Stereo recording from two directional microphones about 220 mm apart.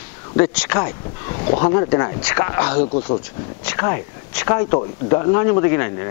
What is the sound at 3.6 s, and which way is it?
Speech, 15° left (ahead or behind).